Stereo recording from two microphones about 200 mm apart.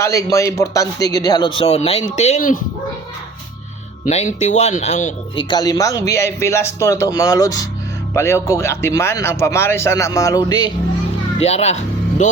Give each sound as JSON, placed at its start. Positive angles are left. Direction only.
{"t": 0.0, "sound": "speech", "side_deg": 15}
{"t": 4.0, "sound": "speech", "side_deg": 35}
{"t": 5.5, "sound": "speech", "side_deg": 20}
{"t": 11.3, "sound": "speech", "side_deg": 30}